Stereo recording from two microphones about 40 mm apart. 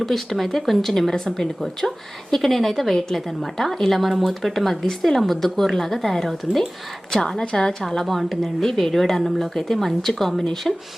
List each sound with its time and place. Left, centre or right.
0.0 s a woman's voice: centre
1.1 s a woman's voice: centre
2.3 s a woman's voice: centre
7.1 s a woman's voice: centre